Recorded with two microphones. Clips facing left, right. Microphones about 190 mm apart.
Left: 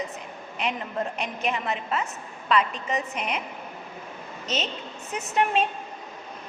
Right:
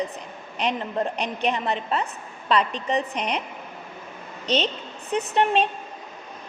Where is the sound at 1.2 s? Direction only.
35° right (ahead or behind).